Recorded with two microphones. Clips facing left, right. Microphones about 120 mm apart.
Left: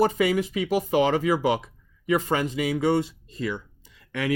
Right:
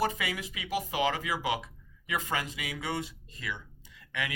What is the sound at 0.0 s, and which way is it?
Speech, 35° left (ahead or behind).